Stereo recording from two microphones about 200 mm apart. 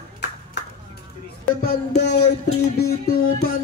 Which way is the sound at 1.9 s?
55° left (ahead or behind).